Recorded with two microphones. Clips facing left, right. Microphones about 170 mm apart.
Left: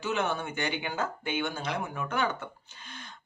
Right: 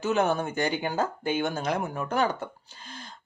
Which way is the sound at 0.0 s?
40° right (ahead or behind).